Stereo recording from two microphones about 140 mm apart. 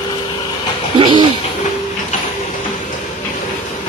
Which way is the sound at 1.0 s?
35° right (ahead or behind).